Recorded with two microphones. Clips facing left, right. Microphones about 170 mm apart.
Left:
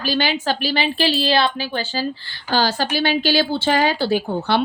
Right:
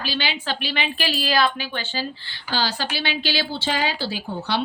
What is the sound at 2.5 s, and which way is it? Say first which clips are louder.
A woman's voice: left 6 dB; 45° left (ahead or behind).